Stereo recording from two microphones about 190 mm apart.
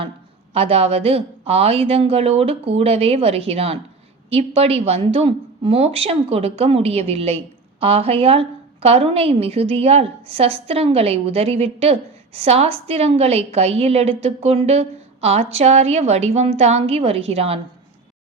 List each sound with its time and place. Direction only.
0.5 s a woman's voice: 30° right (ahead or behind)